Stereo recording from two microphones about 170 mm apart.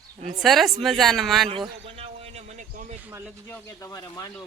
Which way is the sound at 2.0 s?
40° right (ahead or behind).